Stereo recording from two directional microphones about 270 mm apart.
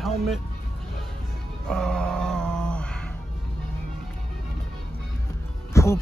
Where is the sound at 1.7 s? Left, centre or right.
Centre.